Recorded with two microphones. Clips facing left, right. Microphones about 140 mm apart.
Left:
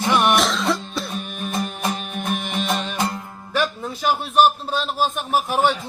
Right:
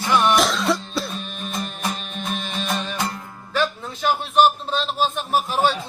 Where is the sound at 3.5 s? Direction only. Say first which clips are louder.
Even; 10° left (ahead or behind).